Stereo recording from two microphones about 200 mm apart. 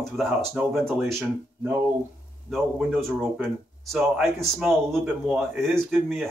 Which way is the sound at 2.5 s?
5° right (ahead or behind).